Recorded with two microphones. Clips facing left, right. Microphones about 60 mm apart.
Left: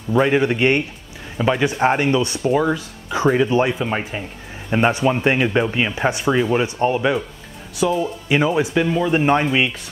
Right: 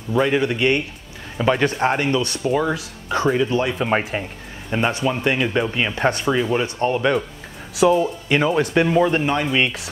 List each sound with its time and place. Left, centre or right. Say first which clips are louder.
0.1 s speech: left 2 dB; centre
1.4 s speech: even; centre
1.7 s speech: left 2 dB; centre
2.5 s speech: left 2 dB; centre
3.2 s speech: left 3 dB; centre
4.1 s speech: right 3 dB; centre
4.6 s speech: left 4 dB; centre
7.8 s speech: right 3 dB; centre
8.3 s speech: left 2 dB; centre
8.8 s speech: right 3 dB; centre
9.2 s speech: left 4 dB; left